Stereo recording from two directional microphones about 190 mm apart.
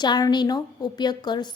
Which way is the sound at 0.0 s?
20° left (ahead or behind).